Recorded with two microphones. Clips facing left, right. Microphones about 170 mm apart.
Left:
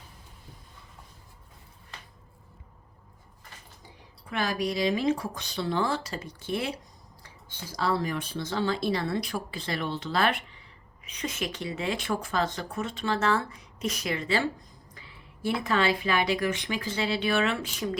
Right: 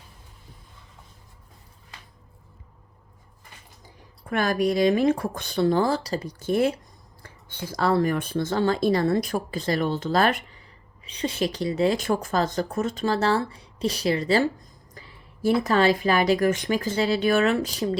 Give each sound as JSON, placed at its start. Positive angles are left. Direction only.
{"t": 3.8, "sound": "speech", "side_deg": -50}
{"t": 11.0, "sound": "speech", "side_deg": -30}